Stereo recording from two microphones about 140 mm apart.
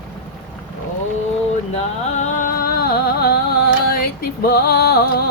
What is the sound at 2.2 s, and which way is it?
Music, 75° left (ahead or behind).